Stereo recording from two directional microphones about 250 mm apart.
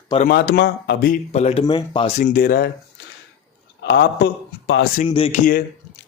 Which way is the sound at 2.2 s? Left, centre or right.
Left.